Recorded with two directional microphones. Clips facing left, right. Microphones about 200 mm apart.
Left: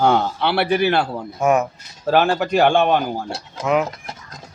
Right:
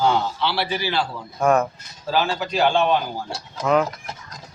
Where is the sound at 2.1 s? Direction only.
60° left (ahead or behind).